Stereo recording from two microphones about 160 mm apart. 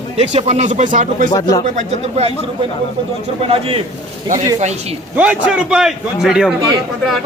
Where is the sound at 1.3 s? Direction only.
25° left (ahead or behind).